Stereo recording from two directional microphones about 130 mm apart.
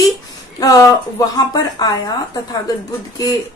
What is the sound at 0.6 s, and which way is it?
Speech, 25° left (ahead or behind).